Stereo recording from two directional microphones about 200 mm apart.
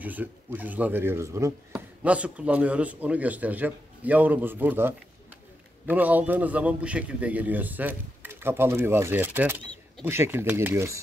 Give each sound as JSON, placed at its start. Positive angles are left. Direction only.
{"t": 0.0, "sound": "a man's voice", "side_deg": -10}